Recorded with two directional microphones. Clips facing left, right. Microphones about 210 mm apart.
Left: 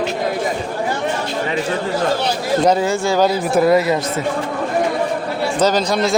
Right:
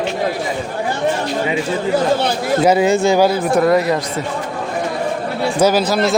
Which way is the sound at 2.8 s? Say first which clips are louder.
Right 4 dB; 20° right (ahead or behind).